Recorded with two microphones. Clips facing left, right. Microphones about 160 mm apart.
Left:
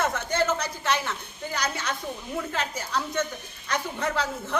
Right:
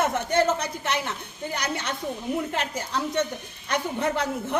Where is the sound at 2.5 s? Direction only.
20° right (ahead or behind).